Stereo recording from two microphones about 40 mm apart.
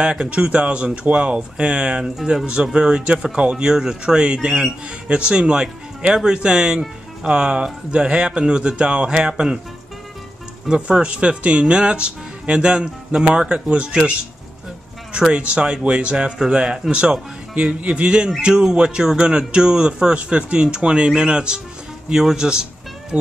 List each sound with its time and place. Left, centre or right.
0.0 s speech: right
10.7 s speech: right
15.1 s speech: right